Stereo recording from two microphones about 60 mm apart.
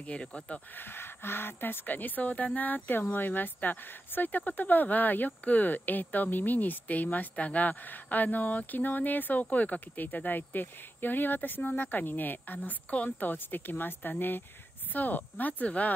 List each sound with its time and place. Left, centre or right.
0.0 s speech: centre
0.7 s speech: left